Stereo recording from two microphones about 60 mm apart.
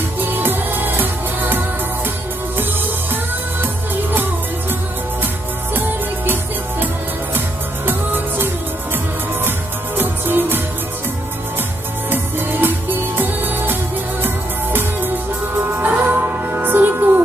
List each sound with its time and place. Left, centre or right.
0.2 s music: right
3.6 s music: right
7.3 s music: right
9.9 s music: right
12.1 s music: right